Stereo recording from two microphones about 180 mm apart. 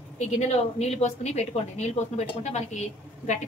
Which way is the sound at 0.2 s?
40° left (ahead or behind).